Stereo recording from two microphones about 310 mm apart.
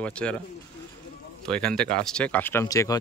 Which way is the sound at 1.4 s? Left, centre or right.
Centre.